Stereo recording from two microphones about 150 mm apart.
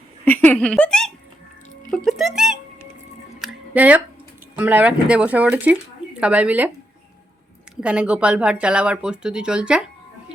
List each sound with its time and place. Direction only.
0.3 s hiccup: 10° left (ahead or behind)
2.0 s music: centre (ahead or behind)
4.5 s speech: 10° right (ahead or behind)
7.8 s speech: 5° right (ahead or behind)